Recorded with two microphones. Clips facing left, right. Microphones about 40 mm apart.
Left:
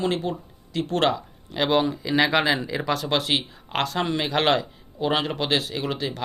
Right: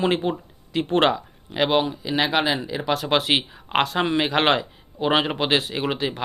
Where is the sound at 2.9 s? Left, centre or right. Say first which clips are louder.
Right 3 dB; centre.